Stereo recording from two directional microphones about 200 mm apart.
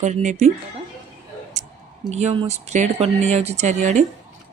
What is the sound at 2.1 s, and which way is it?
Speech, 35° right (ahead or behind).